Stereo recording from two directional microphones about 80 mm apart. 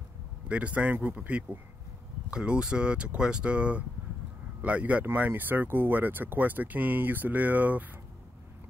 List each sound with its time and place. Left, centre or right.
0.5 s speech: centre